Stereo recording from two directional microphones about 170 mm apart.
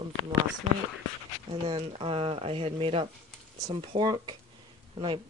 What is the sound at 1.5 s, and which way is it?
Speech, 35° right (ahead or behind).